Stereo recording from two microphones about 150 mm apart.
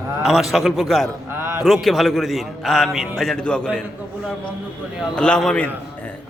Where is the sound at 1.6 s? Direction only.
Centre (ahead or behind).